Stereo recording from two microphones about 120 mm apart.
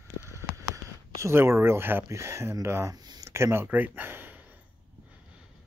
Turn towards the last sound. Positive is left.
turn(degrees=-15)  # may be behind; listen again after turning